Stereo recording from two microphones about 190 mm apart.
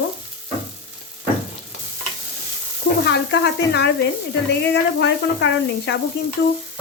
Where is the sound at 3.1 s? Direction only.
65° left (ahead or behind).